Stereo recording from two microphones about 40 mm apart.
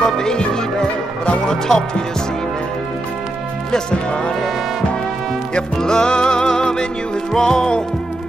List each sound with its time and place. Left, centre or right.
0.0 s music: centre
3.7 s speech: left
5.5 s music: centre